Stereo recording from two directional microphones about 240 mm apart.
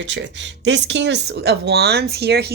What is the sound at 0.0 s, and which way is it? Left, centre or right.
Speech, right.